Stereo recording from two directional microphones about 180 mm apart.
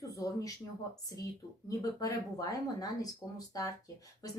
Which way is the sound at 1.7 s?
20° left (ahead or behind).